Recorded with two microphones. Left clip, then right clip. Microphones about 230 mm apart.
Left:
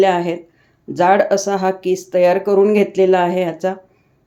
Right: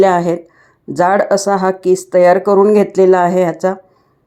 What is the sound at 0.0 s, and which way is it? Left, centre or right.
Speech, right.